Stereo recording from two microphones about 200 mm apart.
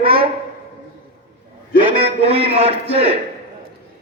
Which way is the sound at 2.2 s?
30° right (ahead or behind).